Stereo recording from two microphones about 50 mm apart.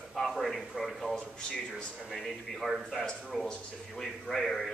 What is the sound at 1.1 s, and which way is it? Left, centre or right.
Speech, centre.